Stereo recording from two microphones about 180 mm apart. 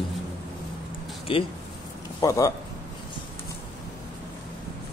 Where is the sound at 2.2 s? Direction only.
20° left (ahead or behind).